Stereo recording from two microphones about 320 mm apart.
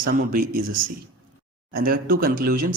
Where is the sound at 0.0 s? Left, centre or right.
Right.